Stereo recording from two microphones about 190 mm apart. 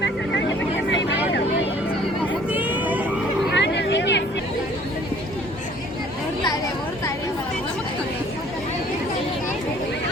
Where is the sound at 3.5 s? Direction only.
65° left (ahead or behind).